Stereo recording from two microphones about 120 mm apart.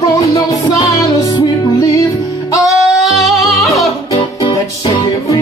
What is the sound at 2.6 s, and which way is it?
Singing, centre (ahead or behind).